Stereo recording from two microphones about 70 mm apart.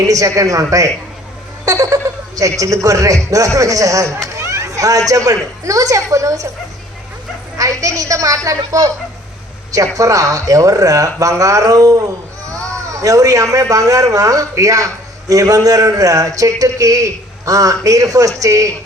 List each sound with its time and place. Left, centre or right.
0.1 s a woman's voice: right
7.8 s speech: right